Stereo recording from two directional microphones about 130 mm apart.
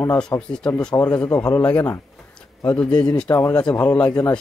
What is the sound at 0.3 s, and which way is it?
Speech, 20° left (ahead or behind).